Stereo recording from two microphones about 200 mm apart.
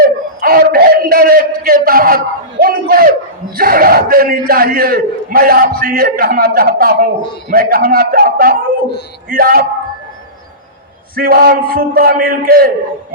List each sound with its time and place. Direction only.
0.0 s a sound: 50° right (ahead or behind)
3.6 s a man's voice: 45° right (ahead or behind)
11.1 s a man's voice: 50° right (ahead or behind)